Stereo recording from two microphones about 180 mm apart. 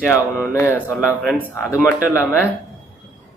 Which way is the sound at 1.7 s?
15° left (ahead or behind).